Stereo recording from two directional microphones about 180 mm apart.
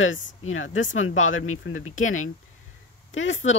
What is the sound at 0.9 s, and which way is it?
Speech, 90° left.